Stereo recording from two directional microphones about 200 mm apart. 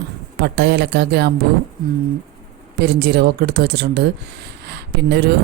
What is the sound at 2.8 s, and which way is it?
Speech, 55° right (ahead or behind).